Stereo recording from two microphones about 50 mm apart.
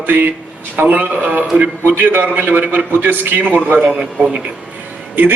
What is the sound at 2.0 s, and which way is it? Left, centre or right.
A man's voice, right.